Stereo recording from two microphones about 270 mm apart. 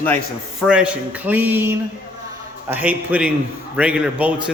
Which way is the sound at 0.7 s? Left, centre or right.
Centre.